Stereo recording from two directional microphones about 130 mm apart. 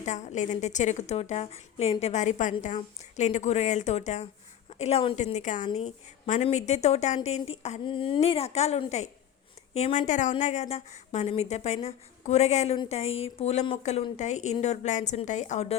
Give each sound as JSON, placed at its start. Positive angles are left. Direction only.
{"t": 0.0, "sound": "a woman's voice", "side_deg": 65}
{"t": 5.7, "sound": "a woman's voice", "side_deg": 60}
{"t": 7.9, "sound": "a woman's voice", "side_deg": 40}
{"t": 10.1, "sound": "a woman's voice", "side_deg": 70}